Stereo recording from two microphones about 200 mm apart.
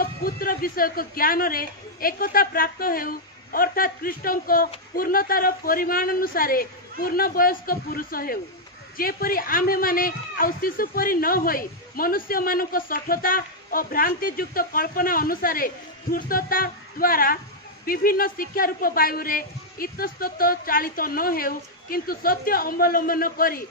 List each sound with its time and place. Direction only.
0.0 s a man's voice: 45° left (ahead or behind)